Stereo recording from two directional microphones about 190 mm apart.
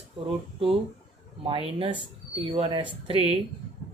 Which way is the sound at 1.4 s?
30° right (ahead or behind).